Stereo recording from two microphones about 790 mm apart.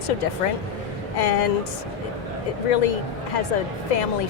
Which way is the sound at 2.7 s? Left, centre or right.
Left.